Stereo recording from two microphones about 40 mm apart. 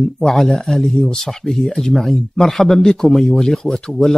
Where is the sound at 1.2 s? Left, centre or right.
Centre.